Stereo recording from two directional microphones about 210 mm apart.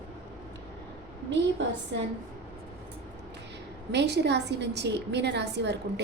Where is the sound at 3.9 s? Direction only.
55° right (ahead or behind).